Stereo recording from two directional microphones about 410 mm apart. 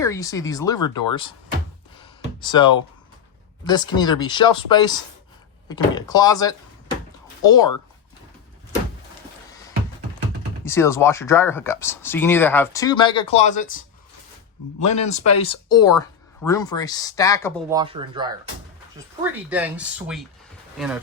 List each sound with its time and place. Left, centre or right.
0.0 s speech: centre
2.0 s a sound: centre
3.9 s speech: centre
10.6 s speech: centre
14.8 s speech: left
16.0 s speech: centre
17.7 s speech: centre